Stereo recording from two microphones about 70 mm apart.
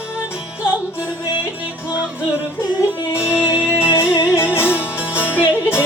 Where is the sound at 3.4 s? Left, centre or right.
Centre.